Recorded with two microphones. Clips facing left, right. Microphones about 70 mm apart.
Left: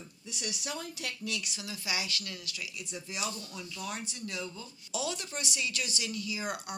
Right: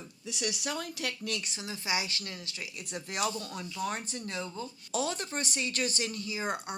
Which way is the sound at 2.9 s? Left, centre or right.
Right.